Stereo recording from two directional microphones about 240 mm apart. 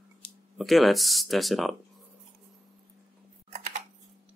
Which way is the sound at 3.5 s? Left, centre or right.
Right.